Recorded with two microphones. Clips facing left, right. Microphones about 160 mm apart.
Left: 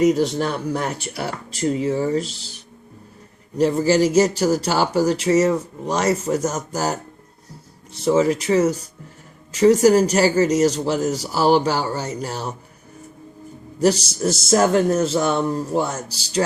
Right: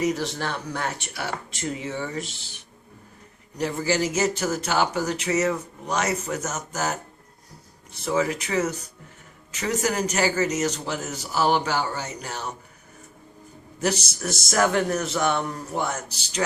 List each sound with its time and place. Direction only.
0.3 s speech: 30° left (ahead or behind)
3.6 s a man's voice: 30° left (ahead or behind)
13.7 s a man's voice: 30° left (ahead or behind)